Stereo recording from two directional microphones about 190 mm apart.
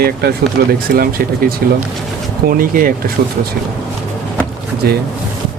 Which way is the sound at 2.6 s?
50° right (ahead or behind).